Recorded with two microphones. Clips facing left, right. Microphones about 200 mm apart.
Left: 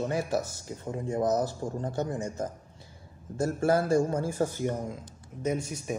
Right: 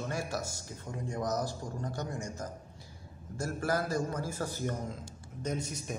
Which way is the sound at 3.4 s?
25° left (ahead or behind).